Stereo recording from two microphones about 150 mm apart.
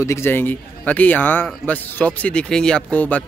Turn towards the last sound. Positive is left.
turn(degrees=10)  # may be behind; listen again after turning